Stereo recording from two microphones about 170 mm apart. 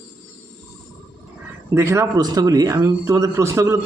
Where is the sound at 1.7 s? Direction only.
15° right (ahead or behind).